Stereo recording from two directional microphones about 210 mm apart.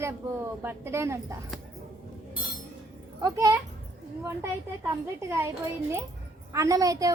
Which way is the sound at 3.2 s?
20° right (ahead or behind).